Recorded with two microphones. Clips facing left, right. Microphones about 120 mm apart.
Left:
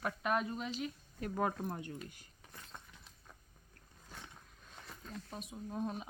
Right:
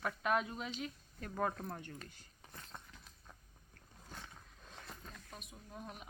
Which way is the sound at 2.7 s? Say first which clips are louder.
Even; 10° right (ahead or behind).